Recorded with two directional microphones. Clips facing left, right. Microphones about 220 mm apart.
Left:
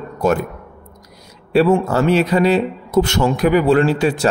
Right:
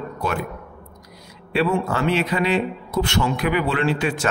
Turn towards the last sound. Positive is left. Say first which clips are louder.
# left 6 dB
turn(degrees=40)  # may be behind; listen again after turning